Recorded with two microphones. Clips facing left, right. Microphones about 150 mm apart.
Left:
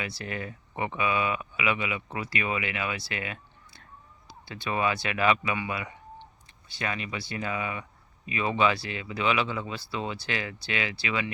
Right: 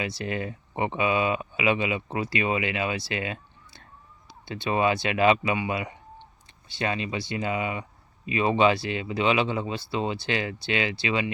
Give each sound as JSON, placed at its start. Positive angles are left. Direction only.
{"t": 0.0, "sound": "speech", "side_deg": -25}